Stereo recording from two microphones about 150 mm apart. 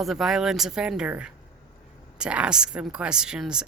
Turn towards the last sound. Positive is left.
turn(degrees=-5)  # may be behind; listen again after turning